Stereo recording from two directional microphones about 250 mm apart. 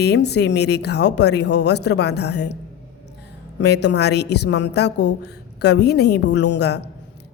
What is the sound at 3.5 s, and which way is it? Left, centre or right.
A woman's voice, left.